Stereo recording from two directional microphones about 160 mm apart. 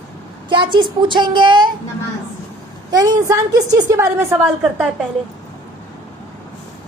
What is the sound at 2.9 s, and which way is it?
A woman's voice, 25° right (ahead or behind).